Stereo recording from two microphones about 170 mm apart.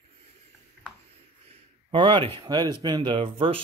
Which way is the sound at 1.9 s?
30° right (ahead or behind).